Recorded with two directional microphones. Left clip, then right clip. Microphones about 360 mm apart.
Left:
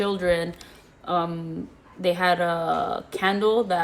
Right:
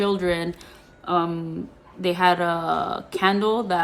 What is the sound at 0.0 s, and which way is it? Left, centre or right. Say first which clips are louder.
A woman's voice: even; centre.